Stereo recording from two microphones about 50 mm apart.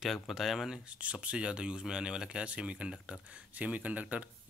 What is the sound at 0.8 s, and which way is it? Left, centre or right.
Speech, right.